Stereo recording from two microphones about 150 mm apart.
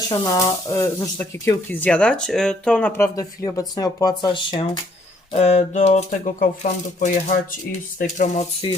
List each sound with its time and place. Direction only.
0.3 s speech: 20° left (ahead or behind)
5.3 s speech: 50° left (ahead or behind)